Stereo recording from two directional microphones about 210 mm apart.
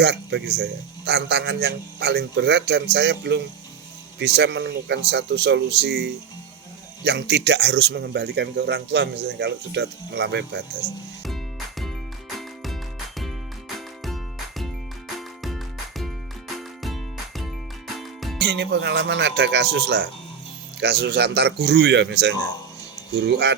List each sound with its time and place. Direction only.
0.0 s speech: 55° right (ahead or behind)
13.7 s music: centre (ahead or behind)
15.4 s music: centre (ahead or behind)
18.3 s speech: 55° right (ahead or behind)